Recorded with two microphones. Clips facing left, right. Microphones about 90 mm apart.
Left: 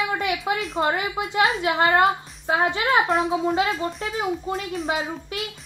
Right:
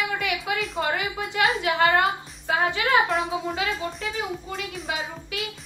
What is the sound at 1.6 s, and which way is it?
A woman's voice, 30° left (ahead or behind).